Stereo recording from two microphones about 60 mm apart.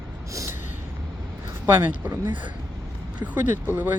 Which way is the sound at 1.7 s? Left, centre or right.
Right.